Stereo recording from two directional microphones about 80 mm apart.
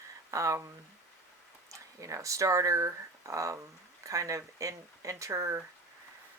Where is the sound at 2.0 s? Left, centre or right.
Right.